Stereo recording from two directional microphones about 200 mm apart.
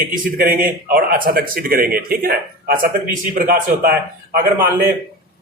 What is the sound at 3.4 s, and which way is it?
Speech, 50° right (ahead or behind).